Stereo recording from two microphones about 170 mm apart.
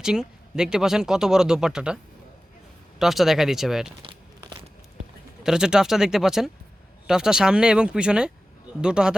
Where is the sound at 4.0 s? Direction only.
30° right (ahead or behind).